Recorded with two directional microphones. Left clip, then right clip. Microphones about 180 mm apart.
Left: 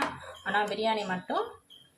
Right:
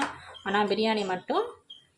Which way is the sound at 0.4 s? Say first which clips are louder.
Right 2 dB; 40° right (ahead or behind).